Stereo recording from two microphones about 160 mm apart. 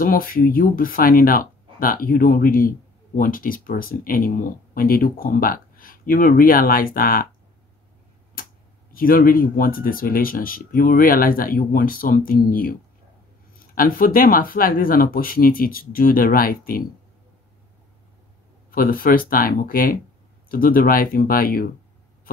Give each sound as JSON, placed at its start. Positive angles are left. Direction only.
{"t": 0.0, "sound": "speech", "side_deg": 65}
{"t": 8.9, "sound": "speech", "side_deg": 65}
{"t": 18.7, "sound": "speech", "side_deg": 65}